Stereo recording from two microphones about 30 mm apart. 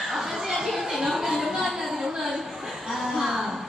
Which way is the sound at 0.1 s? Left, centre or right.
Centre.